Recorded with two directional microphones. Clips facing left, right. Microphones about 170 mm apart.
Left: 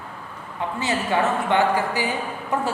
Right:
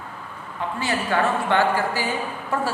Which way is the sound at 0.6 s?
20° left (ahead or behind).